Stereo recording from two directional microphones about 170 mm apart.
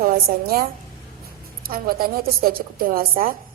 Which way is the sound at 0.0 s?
60° right (ahead or behind).